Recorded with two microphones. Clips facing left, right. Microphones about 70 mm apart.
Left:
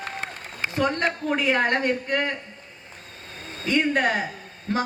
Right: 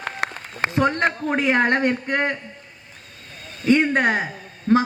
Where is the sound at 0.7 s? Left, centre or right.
Right.